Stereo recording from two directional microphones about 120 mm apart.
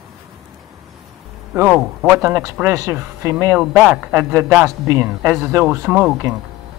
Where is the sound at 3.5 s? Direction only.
5° right (ahead or behind).